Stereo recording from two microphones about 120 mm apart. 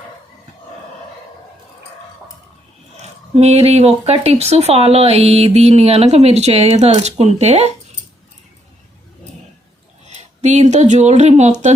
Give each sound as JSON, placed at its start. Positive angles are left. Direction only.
{"t": 3.0, "sound": "speech", "side_deg": -65}
{"t": 10.4, "sound": "speech", "side_deg": -75}